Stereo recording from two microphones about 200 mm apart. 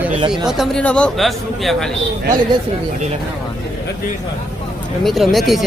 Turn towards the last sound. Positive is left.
turn(degrees=0)  # may be behind; listen again after turning